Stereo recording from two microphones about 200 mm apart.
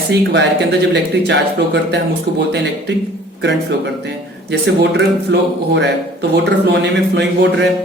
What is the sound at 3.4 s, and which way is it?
Speech, 60° right (ahead or behind).